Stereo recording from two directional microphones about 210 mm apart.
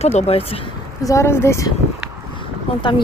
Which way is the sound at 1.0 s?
15° left (ahead or behind).